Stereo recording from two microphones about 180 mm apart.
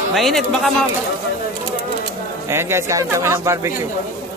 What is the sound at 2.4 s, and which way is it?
Speech, 15° right (ahead or behind).